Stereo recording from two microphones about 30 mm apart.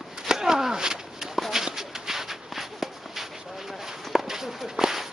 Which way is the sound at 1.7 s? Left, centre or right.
Centre.